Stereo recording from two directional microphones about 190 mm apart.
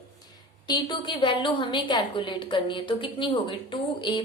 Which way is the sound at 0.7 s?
25° left (ahead or behind).